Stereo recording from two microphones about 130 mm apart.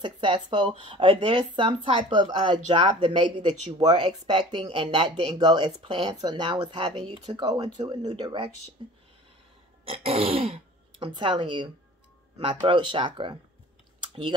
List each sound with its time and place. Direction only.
0.0 s speech: 40° right (ahead or behind)
9.8 s grunt: 50° right (ahead or behind)
11.1 s speech: 40° right (ahead or behind)